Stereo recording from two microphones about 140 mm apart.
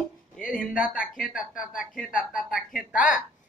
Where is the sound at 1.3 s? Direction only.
5° right (ahead or behind).